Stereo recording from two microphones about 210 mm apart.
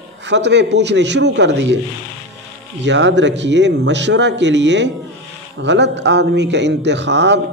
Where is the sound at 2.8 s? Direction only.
60° right (ahead or behind).